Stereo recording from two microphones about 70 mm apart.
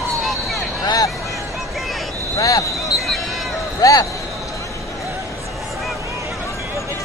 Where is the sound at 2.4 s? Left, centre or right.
Left.